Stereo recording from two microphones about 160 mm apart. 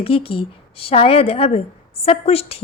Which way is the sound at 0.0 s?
35° left (ahead or behind).